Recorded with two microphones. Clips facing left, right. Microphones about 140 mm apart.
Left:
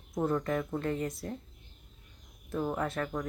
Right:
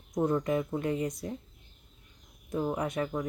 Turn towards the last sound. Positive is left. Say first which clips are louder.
# right 2 dB
turn(degrees=-10)  # may be behind; listen again after turning